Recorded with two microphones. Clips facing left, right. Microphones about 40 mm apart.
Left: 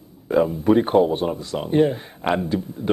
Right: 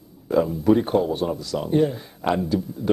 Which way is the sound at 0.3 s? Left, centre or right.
Left.